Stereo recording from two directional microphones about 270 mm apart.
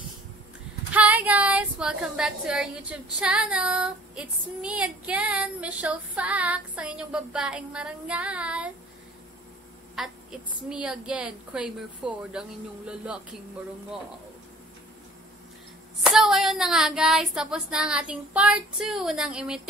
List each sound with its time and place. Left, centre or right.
0.9 s a woman's voice: centre
9.9 s a woman's voice: centre
16.0 s a woman's voice: centre